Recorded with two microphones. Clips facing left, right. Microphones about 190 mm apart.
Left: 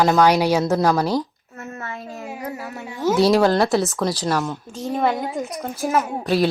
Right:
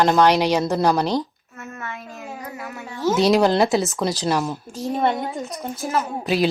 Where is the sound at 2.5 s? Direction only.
35° left (ahead or behind).